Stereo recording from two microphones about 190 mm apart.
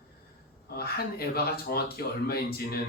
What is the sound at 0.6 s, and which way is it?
Speech, 55° left (ahead or behind).